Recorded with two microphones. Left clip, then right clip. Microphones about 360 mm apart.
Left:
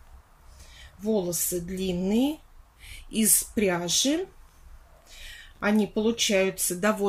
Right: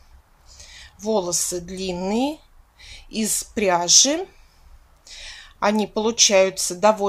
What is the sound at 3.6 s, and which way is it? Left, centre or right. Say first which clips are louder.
Speech: right 10 dB; centre.